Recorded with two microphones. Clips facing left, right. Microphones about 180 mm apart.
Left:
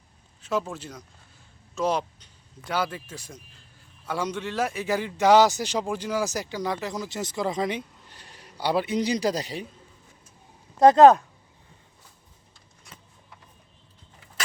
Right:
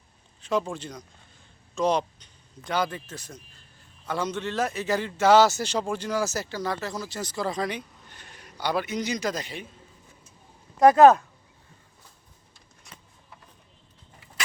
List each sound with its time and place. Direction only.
0.4 s speech: 5° left (ahead or behind); by 7.9 s 20° left (ahead or behind)
8.1 s a man's voice: 35° left (ahead or behind)
10.8 s speech: 25° left (ahead or behind)